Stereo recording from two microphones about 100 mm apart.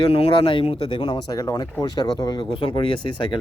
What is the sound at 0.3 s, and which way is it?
Speech, 55° left (ahead or behind).